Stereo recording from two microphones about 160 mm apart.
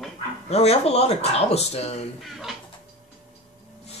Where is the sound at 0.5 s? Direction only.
40° left (ahead or behind).